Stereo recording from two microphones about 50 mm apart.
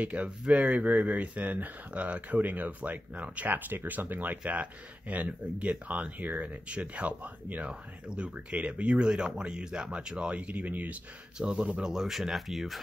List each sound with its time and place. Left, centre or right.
0.0 s speech: right
11.3 s speech: right
11.8 s speech: centre